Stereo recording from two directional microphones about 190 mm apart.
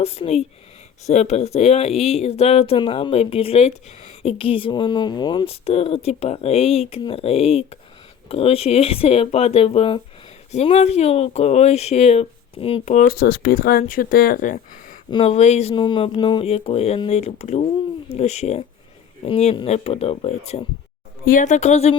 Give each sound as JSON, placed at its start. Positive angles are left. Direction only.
{"t": 0.0, "sound": "speech", "side_deg": 35}
{"t": 15.1, "sound": "speech", "side_deg": 30}